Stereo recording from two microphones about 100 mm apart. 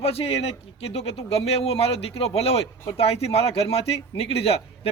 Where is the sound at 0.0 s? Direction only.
75° left (ahead or behind).